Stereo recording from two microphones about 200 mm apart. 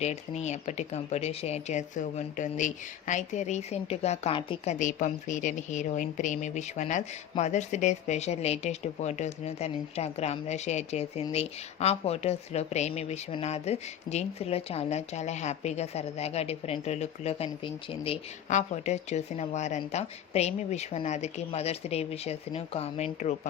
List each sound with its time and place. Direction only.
0.0 s speech: 35° left (ahead or behind)